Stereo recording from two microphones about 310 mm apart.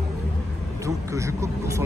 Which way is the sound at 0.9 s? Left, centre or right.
Centre.